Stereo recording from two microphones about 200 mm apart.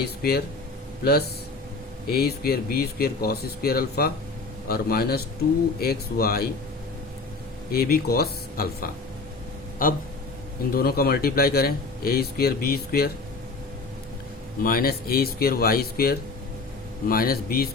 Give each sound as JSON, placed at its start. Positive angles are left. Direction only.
{"t": 0.0, "sound": "speech", "side_deg": 50}
{"t": 2.0, "sound": "speech", "side_deg": 50}
{"t": 7.7, "sound": "speech", "side_deg": 50}
{"t": 14.6, "sound": "speech", "side_deg": 45}